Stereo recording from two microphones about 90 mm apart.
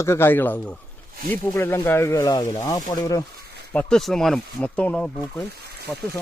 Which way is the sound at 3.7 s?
20° left (ahead or behind).